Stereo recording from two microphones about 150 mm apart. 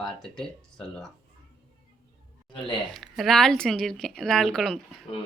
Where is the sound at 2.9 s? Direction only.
Centre (ahead or behind).